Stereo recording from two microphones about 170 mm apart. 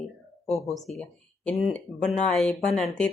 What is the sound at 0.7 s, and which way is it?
Speech, centre (ahead or behind).